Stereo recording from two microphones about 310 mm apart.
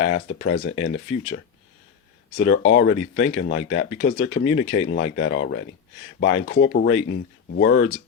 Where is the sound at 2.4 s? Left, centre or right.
Left.